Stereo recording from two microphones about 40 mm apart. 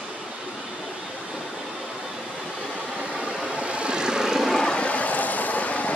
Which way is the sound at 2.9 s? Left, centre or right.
Right.